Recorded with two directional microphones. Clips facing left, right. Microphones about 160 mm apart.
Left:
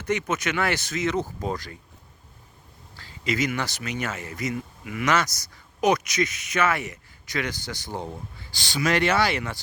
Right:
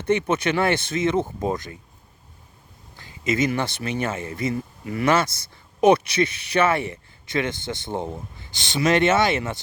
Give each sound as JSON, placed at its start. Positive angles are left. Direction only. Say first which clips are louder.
{"t": 0.0, "sound": "speech", "louder": "right 5 dB", "side_deg": -30}
{"t": 2.9, "sound": "speech", "louder": "right 4 dB", "side_deg": -20}